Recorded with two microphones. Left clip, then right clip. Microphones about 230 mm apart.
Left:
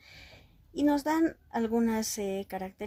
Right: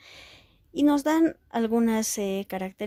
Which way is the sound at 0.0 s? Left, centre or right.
Right.